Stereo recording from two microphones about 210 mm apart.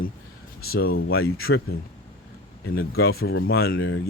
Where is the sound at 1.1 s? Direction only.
80° left.